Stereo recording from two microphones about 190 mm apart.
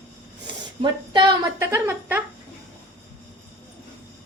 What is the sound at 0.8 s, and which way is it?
A woman's voice, 20° right (ahead or behind).